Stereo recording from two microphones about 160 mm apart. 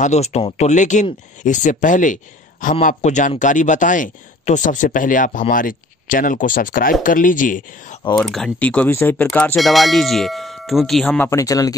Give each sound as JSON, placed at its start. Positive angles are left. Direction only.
{"t": 0.0, "sound": "a man's voice", "side_deg": 45}
{"t": 8.2, "sound": "speech", "side_deg": 0}
{"t": 11.2, "sound": "speech", "side_deg": 20}